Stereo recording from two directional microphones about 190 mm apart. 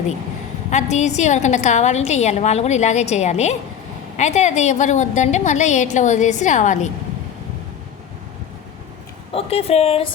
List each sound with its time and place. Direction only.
0.7 s a woman's voice: 40° left (ahead or behind)
9.3 s a woman's voice: 30° left (ahead or behind)